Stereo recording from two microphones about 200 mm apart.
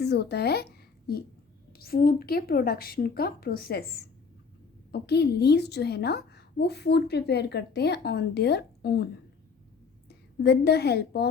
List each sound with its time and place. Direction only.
0.0 s a child's voice: 55° left (ahead or behind)
10.1 s a woman's voice: 55° left (ahead or behind)